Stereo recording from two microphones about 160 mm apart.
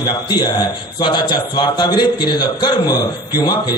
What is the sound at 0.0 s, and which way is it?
A man's voice, 25° left (ahead or behind).